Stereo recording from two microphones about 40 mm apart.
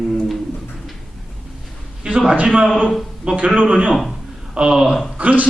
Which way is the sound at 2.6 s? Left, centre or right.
Centre.